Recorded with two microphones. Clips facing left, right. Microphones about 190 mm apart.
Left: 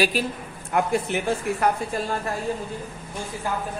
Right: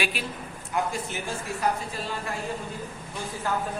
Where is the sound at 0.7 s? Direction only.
60° left (ahead or behind).